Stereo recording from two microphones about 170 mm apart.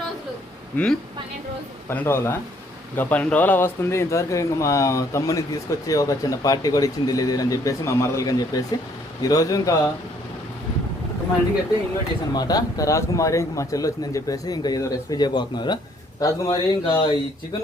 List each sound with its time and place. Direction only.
0.7 s a man's voice: 10° left (ahead or behind)
12.3 s speech: 25° left (ahead or behind)